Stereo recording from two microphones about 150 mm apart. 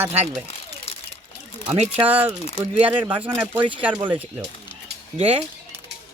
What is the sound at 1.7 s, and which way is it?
Speech, 45° right (ahead or behind).